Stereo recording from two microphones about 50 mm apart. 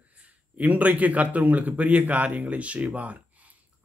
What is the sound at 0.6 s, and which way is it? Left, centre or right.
A man's voice, right.